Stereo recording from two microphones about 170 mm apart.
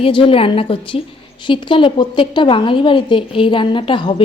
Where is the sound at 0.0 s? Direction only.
30° left (ahead or behind).